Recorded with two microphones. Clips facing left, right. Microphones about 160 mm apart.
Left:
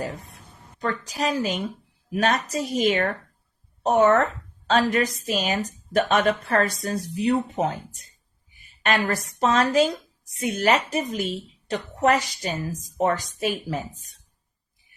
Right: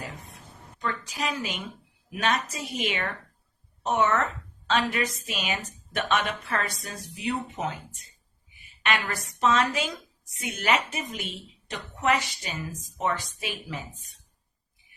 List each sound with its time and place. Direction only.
0.0 s a woman's voice: 35° left (ahead or behind)